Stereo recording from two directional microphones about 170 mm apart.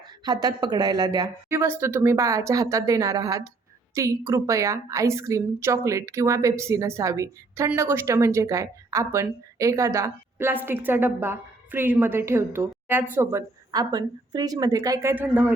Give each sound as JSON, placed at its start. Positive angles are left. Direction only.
{"t": 0.3, "sound": "a woman's voice", "side_deg": -25}
{"t": 13.7, "sound": "a woman's voice", "side_deg": -25}